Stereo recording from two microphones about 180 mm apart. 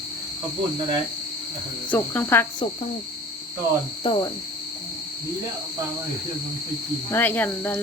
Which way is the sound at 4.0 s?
30° left (ahead or behind).